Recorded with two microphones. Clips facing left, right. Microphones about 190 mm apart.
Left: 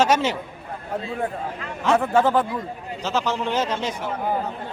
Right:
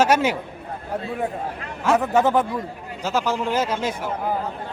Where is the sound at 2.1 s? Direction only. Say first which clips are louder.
Even; 20° right (ahead or behind).